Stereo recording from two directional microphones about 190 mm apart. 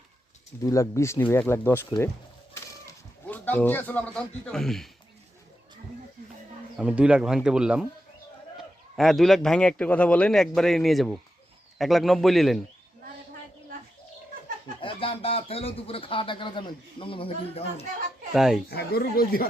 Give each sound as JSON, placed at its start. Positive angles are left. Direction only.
{"t": 0.6, "sound": "speech", "side_deg": 15}
{"t": 2.6, "sound": "a sound", "side_deg": 10}
{"t": 6.7, "sound": "a man's voice", "side_deg": -5}
{"t": 9.0, "sound": "a man's voice", "side_deg": 0}
{"t": 14.8, "sound": "speech", "side_deg": 30}
{"t": 18.3, "sound": "a man's voice", "side_deg": 0}
{"t": 18.7, "sound": "speech", "side_deg": 55}